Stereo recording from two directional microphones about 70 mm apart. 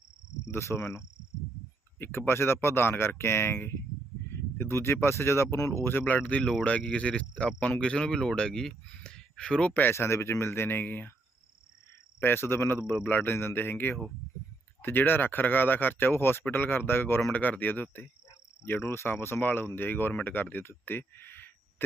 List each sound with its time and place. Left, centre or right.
0.5 s speech: left; by 9.7 s centre
9.9 s speech: left
12.2 s speech: left
18.6 s speech: left